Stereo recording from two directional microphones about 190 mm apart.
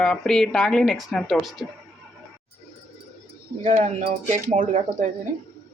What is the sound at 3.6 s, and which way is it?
Speech, 35° right (ahead or behind).